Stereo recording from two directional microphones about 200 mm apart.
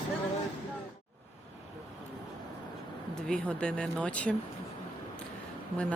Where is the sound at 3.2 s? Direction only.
5° left (ahead or behind).